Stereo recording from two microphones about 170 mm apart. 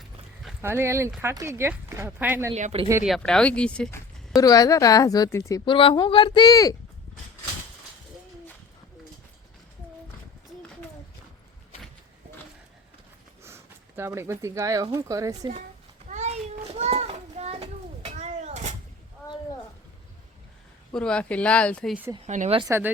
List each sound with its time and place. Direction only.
0.6 s speech: 15° right (ahead or behind)
2.6 s speech: 45° right (ahead or behind)
3.0 s speech: centre (ahead or behind)
4.4 s a woman's voice: 20° left (ahead or behind)
5.6 s a woman's voice: 30° left (ahead or behind)
13.4 s a sound: 15° right (ahead or behind)
14.9 s speech: 20° right (ahead or behind)
16.0 s children playing: 40° right (ahead or behind)
20.9 s speech: 5° left (ahead or behind)
22.3 s speech: 45° right (ahead or behind)